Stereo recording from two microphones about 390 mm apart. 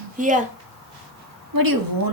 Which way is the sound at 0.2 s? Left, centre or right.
Centre.